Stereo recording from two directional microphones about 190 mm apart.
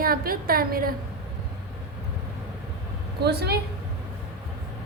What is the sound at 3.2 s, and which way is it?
Speech, 60° right (ahead or behind).